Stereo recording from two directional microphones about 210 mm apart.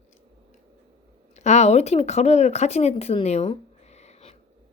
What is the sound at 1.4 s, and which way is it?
A woman's voice, 35° left (ahead or behind).